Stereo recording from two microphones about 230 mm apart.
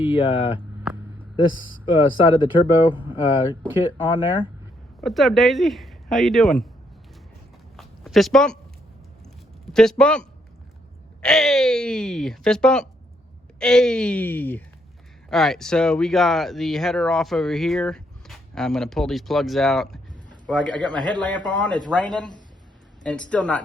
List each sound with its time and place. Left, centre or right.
0.2 s speech: left
1.5 s speech: left
1.8 s speech: left
4.9 s speech: centre
7.8 s a sound: centre
9.7 s speech: centre
23.0 s speech: centre